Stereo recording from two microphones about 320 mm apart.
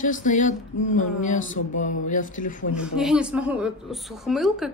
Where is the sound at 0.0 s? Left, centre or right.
Left.